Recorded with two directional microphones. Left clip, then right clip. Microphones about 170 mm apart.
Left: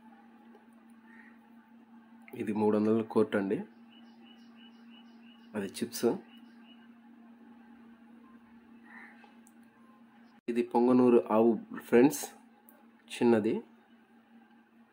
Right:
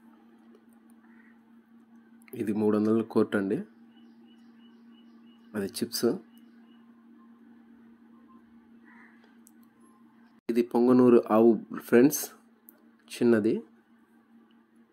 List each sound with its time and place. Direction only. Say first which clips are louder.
2.5 s speech: right 2 dB; 10° right (ahead or behind)
5.5 s speech: right 4 dB; 15° right (ahead or behind)
10.4 s a sound: right 3 dB; 25° right (ahead or behind)
10.8 s speech: right 3 dB; 15° right (ahead or behind)